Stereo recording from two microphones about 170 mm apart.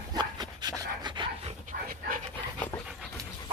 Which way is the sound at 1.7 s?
55° right (ahead or behind).